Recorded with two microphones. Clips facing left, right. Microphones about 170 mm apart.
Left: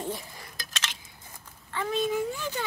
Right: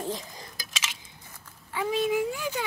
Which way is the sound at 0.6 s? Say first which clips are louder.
Left 1 dB; 5° right (ahead or behind).